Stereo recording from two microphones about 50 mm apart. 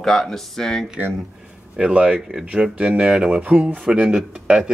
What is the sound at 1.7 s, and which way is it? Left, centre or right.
Speech, centre.